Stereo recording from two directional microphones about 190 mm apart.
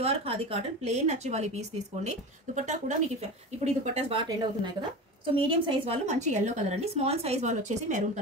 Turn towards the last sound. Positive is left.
turn(degrees=-40)  # may be behind; listen again after turning